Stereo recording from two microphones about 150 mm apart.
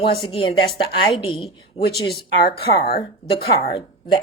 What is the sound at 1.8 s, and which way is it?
Speech, 45° left (ahead or behind).